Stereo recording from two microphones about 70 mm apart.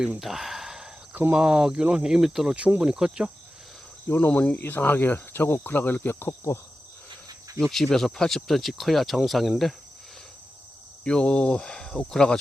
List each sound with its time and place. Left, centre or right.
0.2 s sigh: centre
1.3 s speech: centre
2.6 s speech: centre
4.3 s cricket: left
7.6 s speech: centre
11.0 s speech: centre